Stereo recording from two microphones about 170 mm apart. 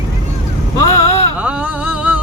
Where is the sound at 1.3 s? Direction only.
5° right (ahead or behind).